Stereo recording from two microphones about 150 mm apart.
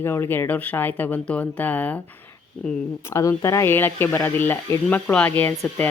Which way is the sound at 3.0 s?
20° left (ahead or behind).